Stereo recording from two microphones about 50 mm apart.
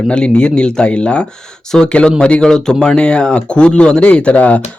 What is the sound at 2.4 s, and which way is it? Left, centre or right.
Speech, centre.